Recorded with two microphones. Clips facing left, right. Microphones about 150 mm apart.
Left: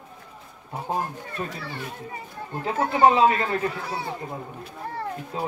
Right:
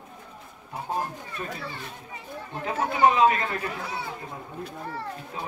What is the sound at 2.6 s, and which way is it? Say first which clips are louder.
Speech: left 3 dB; 30° left (ahead or behind).